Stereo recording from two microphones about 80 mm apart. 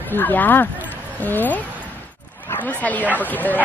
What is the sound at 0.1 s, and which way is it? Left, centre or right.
A woman's voice, left.